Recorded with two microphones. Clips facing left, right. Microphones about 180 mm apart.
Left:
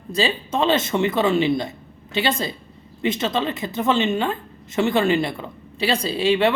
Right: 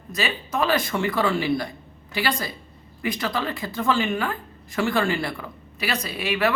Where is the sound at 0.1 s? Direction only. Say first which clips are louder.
Left 5 dB; 30° left (ahead or behind).